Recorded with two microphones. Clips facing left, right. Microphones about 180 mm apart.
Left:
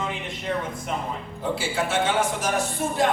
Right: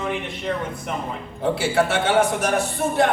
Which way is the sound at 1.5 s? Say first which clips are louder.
Right 4 dB; 65° right (ahead or behind).